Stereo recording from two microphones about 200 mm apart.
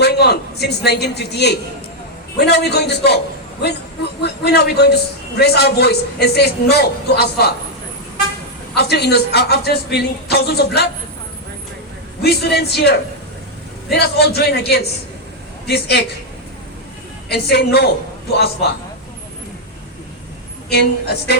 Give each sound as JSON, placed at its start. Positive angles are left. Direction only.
{"t": 0.0, "sound": "a man's voice", "side_deg": 55}
{"t": 4.2, "sound": "a woman's voice", "side_deg": 55}
{"t": 8.7, "sound": "a woman's voice", "side_deg": 55}
{"t": 12.2, "sound": "a man's voice", "side_deg": 55}
{"t": 17.2, "sound": "a man's voice", "side_deg": 55}
{"t": 20.7, "sound": "a woman's voice", "side_deg": 55}